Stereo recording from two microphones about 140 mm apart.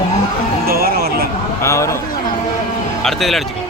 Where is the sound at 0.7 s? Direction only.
90° right.